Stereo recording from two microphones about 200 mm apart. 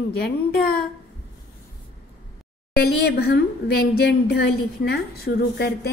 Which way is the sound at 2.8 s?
55° left (ahead or behind).